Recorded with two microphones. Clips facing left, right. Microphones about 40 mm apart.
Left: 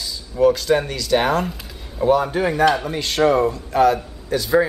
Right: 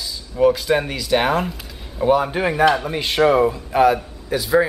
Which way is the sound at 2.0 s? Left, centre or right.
Centre.